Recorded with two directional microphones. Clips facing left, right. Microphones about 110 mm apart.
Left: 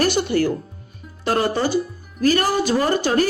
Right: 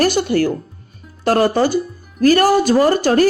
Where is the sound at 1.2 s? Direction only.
45° right (ahead or behind).